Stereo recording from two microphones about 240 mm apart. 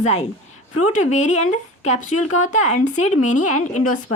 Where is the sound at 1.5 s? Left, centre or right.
Left.